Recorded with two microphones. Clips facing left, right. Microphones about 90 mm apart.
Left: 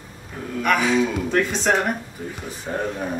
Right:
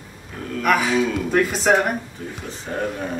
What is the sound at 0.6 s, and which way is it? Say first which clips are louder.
Speech: right 1 dB; centre (ahead or behind).